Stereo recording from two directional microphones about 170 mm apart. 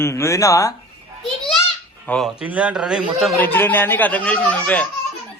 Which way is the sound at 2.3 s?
5° right (ahead or behind).